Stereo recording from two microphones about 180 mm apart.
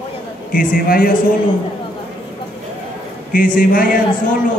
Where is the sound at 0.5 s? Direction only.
50° left (ahead or behind).